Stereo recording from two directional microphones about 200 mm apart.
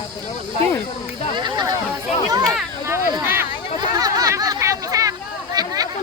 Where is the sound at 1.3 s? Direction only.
25° right (ahead or behind).